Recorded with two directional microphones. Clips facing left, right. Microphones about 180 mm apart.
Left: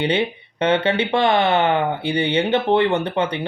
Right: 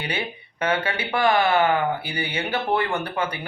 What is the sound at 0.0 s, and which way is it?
Speech, 30° left (ahead or behind).